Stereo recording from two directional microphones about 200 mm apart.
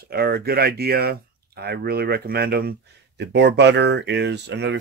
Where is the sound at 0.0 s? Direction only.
50° right (ahead or behind).